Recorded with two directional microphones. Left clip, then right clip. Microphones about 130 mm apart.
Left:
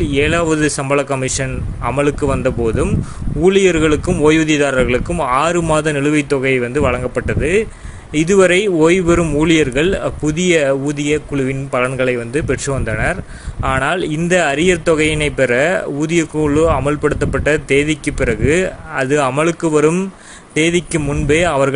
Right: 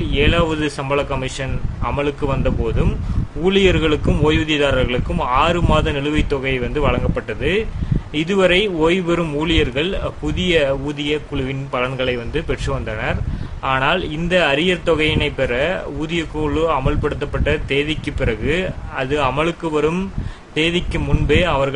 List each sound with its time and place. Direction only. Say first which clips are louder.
0.1 s speech: left 1 dB; 40° left (ahead or behind)